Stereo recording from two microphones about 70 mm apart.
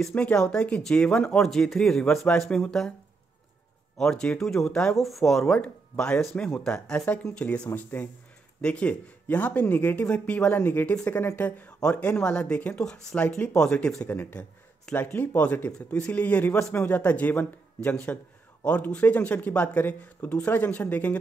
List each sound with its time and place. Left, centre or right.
0.1 s speech: centre
4.0 s a man's voice: centre
14.0 s a man's voice: left